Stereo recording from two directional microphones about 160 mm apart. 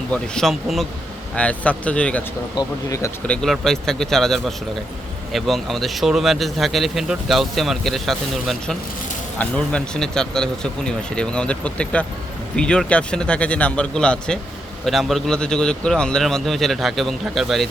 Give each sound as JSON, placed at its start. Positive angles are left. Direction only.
{"t": 0.1, "sound": "speech", "side_deg": 5}
{"t": 2.6, "sound": "speech", "side_deg": 20}
{"t": 3.2, "sound": "speech", "side_deg": 5}